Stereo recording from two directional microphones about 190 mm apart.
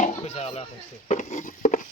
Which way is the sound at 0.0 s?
35° left (ahead or behind).